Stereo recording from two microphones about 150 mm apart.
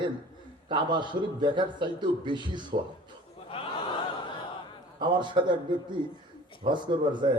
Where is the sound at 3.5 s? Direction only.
35° left (ahead or behind).